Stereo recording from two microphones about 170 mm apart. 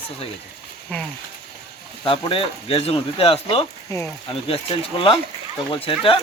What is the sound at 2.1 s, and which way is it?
Speech, 30° left (ahead or behind).